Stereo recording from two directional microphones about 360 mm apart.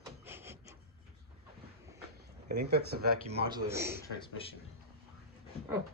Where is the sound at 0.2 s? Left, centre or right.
Centre.